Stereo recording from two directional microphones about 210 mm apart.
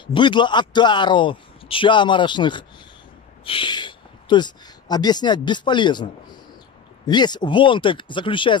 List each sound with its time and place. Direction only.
0.0 s a man's voice: 20° left (ahead or behind)
7.1 s a man's voice: 20° left (ahead or behind)